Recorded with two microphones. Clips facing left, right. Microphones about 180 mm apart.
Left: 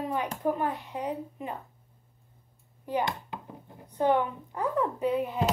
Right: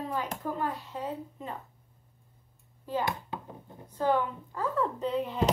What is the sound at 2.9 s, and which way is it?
A woman's voice, 15° left (ahead or behind).